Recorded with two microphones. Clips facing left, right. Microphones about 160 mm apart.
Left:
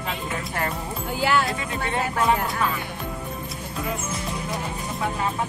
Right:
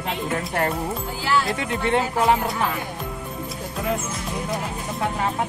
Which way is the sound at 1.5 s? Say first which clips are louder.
Right 5 dB; 70° right (ahead or behind).